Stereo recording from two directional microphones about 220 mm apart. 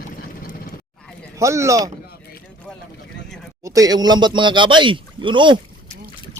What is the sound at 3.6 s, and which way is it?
Speech, 15° right (ahead or behind).